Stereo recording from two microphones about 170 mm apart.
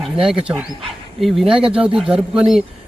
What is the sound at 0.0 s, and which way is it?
Speech, 5° right (ahead or behind).